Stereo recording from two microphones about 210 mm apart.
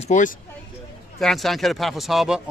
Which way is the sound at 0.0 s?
35° left (ahead or behind).